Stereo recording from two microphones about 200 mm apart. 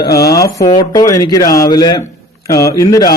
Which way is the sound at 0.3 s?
15° left (ahead or behind).